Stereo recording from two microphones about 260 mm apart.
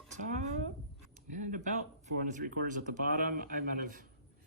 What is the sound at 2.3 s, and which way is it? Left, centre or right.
Speech, right.